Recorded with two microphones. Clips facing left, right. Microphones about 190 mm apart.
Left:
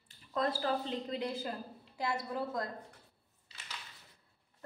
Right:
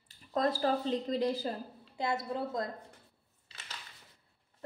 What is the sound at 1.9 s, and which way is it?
Speech, 25° right (ahead or behind).